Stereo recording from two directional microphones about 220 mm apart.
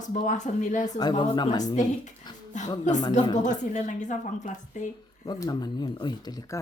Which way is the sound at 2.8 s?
35° left (ahead or behind).